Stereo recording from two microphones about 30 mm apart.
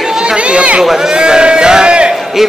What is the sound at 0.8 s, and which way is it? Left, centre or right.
Speech, centre.